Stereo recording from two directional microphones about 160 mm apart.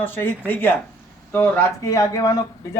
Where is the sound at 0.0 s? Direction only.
10° left (ahead or behind).